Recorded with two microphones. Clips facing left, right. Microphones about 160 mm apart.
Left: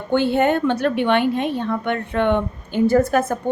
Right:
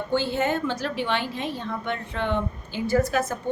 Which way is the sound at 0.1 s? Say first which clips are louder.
Left 8 dB; 60° left (ahead or behind).